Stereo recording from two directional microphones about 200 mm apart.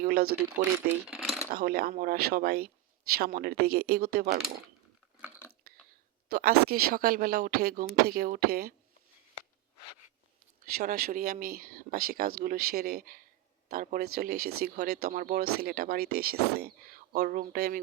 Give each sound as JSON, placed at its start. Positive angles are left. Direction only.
{"t": 0.0, "sound": "a sound", "side_deg": -50}
{"t": 1.0, "sound": "coin", "side_deg": -5}
{"t": 1.5, "sound": "speech", "side_deg": -50}
{"t": 6.2, "sound": "speech", "side_deg": -50}
{"t": 10.8, "sound": "speech", "side_deg": -45}